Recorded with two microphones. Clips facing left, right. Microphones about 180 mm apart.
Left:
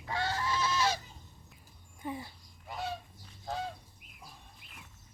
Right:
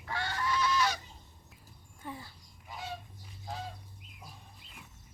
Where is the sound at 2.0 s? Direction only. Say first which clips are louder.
Left 5 dB; 15° left (ahead or behind).